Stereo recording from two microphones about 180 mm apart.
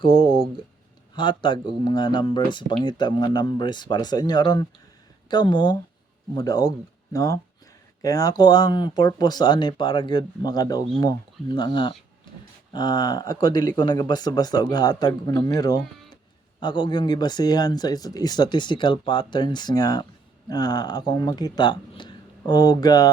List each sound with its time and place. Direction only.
0.0 s speech: 30° left (ahead or behind)